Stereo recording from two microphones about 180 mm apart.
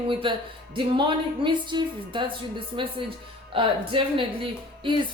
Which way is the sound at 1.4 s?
25° right (ahead or behind).